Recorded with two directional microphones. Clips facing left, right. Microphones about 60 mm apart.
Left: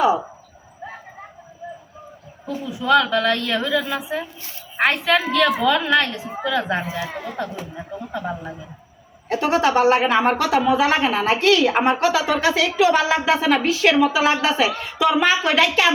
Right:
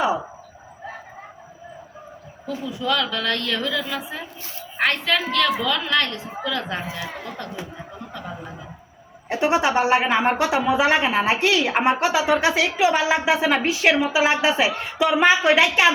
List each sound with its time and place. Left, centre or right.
2.6 s a woman's voice: centre
9.3 s a woman's voice: centre